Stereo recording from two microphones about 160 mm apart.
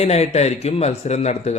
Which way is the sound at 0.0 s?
40° left (ahead or behind).